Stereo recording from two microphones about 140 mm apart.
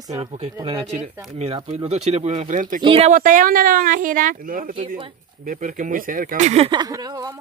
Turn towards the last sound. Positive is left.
turn(degrees=-25)  # may be behind; listen again after turning